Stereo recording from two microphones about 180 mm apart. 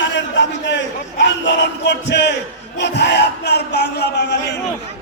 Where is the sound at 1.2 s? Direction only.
80° left.